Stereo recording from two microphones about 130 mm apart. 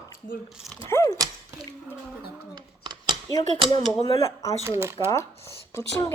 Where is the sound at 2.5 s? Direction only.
35° right (ahead or behind).